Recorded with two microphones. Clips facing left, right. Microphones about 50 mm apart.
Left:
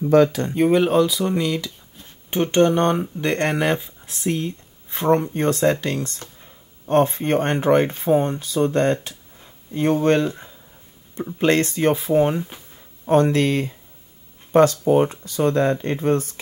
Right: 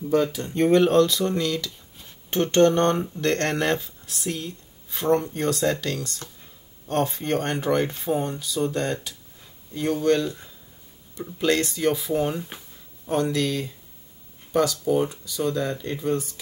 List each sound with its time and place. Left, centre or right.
0.1 s speech: left
0.6 s speech: centre; by 16.3 s left